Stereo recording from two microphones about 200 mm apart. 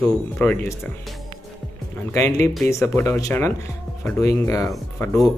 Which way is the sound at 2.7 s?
15° left (ahead or behind).